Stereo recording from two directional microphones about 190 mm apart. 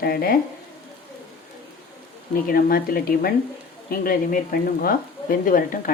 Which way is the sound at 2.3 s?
50° left (ahead or behind).